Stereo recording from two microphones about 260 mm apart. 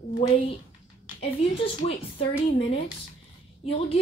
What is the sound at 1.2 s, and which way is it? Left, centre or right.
Speech, left.